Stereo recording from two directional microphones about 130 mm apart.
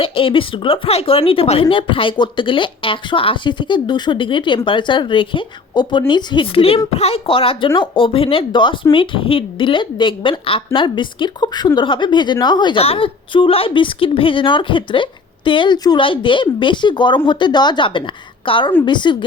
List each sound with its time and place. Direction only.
0.0 s a woman's voice: 45° left (ahead or behind)